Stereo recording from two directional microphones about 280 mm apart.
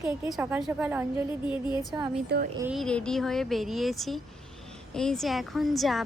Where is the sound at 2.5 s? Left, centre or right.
Centre.